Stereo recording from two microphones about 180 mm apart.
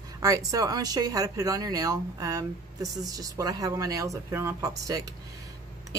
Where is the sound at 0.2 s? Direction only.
20° right (ahead or behind).